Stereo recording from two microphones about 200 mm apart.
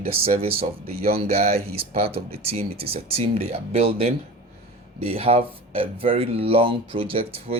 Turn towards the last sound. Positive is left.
turn(degrees=-30)  # may be behind; listen again after turning